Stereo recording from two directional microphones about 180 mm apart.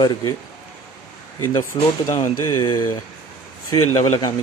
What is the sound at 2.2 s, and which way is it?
Speech, 15° left (ahead or behind).